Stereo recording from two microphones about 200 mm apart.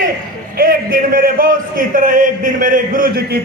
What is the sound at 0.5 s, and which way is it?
A man's voice, 45° right (ahead or behind).